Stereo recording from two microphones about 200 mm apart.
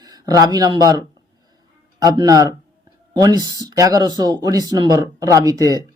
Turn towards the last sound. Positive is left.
turn(degrees=-15)  # may be behind; listen again after turning